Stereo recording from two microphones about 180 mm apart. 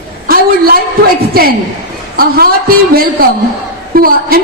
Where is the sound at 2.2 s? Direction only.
55° right (ahead or behind).